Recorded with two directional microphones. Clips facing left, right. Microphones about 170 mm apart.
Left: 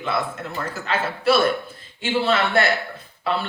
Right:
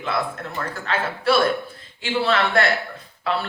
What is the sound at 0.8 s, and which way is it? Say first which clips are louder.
A woman's voice: left 1 dB; centre (ahead or behind).